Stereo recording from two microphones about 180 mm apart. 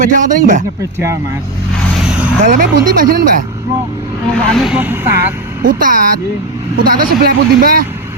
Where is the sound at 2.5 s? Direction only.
50° right (ahead or behind).